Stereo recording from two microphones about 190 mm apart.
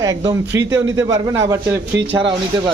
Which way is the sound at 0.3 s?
15° right (ahead or behind).